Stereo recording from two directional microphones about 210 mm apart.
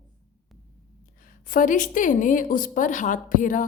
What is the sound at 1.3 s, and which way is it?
A woman's voice, 40° left (ahead or behind).